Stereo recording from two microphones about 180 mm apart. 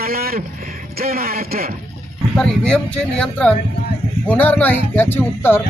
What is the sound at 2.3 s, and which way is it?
Speech, 5° left (ahead or behind).